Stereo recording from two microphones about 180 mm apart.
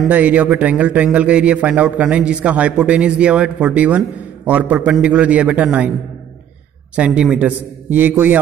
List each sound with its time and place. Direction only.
0.0 s a man's voice: 10° right (ahead or behind)
7.0 s a man's voice: 5° right (ahead or behind)